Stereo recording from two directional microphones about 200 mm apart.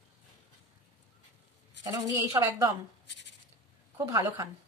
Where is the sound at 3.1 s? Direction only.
60° left (ahead or behind).